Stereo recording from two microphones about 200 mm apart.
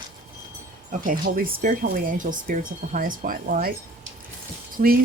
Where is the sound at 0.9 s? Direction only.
45° right (ahead or behind).